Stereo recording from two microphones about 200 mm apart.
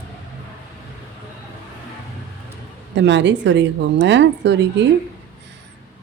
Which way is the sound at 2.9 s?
60° right (ahead or behind).